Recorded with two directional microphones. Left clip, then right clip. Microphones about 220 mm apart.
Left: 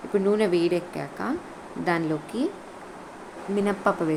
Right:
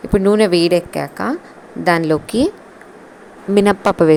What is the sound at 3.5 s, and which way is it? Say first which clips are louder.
Speech: right 11 dB; 45° right (ahead or behind).